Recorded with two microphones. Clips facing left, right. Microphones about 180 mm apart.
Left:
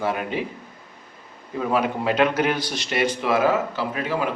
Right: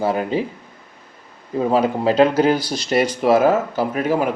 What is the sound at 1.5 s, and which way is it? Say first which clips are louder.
Speech: right 5 dB; 30° right (ahead or behind).